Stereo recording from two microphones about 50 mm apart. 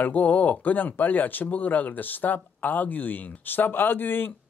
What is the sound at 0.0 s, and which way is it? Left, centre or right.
A man's voice, left.